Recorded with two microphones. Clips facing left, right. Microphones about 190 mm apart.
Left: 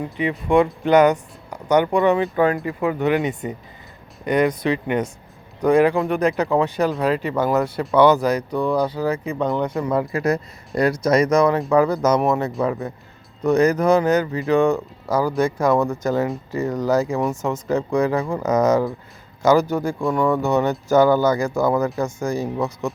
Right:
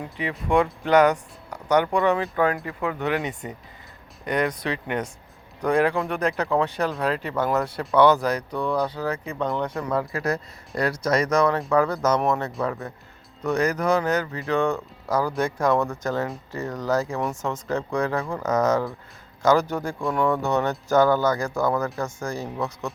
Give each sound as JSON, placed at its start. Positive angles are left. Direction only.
{"t": 0.2, "sound": "speech", "side_deg": 0}
{"t": 9.9, "sound": "speech", "side_deg": 20}
{"t": 12.5, "sound": "speech", "side_deg": 15}